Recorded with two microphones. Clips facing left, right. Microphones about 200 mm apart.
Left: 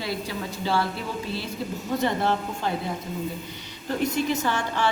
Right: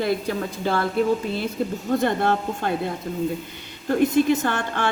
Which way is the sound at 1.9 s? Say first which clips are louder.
Right 3 dB; 55° right (ahead or behind).